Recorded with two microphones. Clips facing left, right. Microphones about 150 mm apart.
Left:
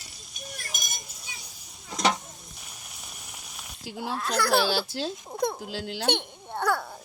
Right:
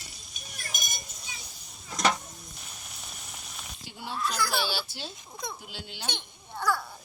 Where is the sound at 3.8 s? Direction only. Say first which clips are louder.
Left 6 dB; 90° left.